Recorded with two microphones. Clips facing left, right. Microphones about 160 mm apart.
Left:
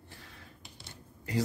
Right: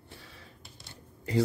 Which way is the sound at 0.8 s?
25° right (ahead or behind).